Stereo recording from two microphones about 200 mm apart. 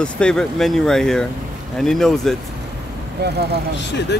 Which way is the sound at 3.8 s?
60° left (ahead or behind).